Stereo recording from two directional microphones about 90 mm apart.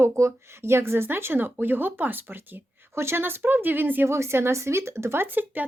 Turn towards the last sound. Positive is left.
turn(degrees=-20)  # may be behind; listen again after turning